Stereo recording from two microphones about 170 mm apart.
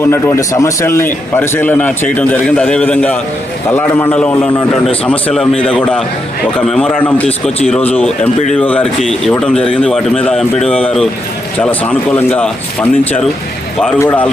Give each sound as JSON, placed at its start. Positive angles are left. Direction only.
{"t": 0.0, "sound": "a man's voice", "side_deg": 15}